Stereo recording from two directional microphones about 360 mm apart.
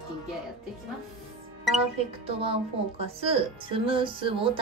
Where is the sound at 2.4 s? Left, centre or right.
Centre.